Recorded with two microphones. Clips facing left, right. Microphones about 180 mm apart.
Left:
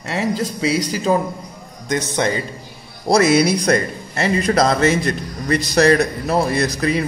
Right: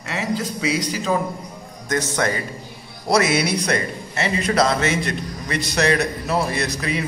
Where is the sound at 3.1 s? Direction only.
35° left (ahead or behind).